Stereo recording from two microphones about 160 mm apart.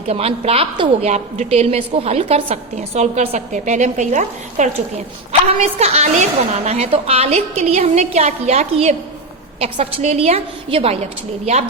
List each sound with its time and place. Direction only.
0.1 s a woman's voice: 40° right (ahead or behind)